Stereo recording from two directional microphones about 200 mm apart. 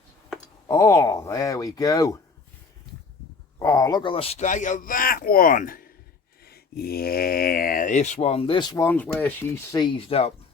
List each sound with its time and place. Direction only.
0.7 s speech: 15° left (ahead or behind)
3.6 s speech: 15° left (ahead or behind)
9.7 s speech: 25° left (ahead or behind)